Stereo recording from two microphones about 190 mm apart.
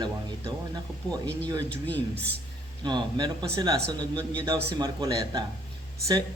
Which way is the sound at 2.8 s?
20° right (ahead or behind).